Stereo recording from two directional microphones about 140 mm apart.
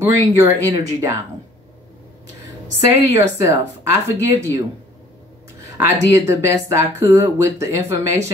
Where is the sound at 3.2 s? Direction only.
25° right (ahead or behind).